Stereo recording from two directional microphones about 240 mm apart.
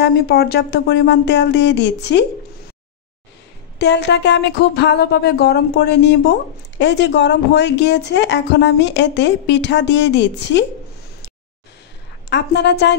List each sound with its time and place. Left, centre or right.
0.0 s speech: left
3.7 s speech: left
12.3 s speech: left